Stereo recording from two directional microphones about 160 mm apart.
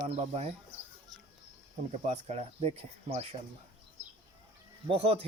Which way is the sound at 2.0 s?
45° right (ahead or behind).